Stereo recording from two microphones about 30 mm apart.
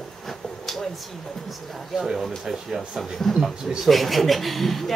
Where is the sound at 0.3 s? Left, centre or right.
Centre.